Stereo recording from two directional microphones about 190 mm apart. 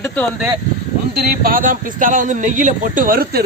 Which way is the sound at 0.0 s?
5° left (ahead or behind).